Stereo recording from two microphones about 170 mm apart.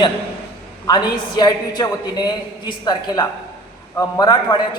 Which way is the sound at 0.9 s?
25° left (ahead or behind).